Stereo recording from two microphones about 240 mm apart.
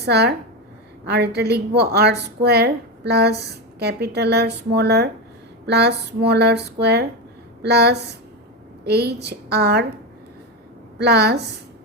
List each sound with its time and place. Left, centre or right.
0.0 s a woman's voice: right
10.9 s a woman's voice: right